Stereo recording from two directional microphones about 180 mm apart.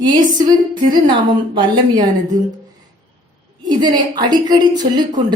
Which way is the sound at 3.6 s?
25° right (ahead or behind).